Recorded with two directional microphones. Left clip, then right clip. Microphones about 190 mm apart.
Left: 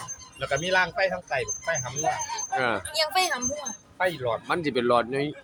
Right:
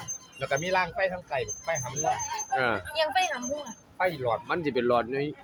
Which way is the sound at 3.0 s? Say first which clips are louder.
Left 2 dB; 65° left (ahead or behind).